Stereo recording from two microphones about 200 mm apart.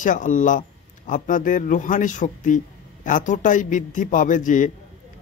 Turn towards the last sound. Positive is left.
turn(degrees=40)  # may be behind; listen again after turning